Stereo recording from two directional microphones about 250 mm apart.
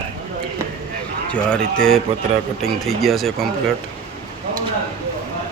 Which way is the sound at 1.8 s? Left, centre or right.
Centre.